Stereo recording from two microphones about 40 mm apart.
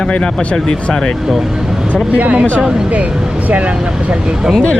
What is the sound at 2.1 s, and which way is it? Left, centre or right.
Speech, right.